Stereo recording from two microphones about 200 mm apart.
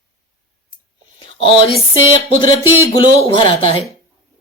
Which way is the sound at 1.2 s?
25° left (ahead or behind).